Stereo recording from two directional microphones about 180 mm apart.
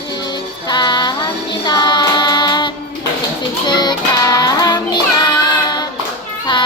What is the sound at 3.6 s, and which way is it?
Child singing, 25° left (ahead or behind).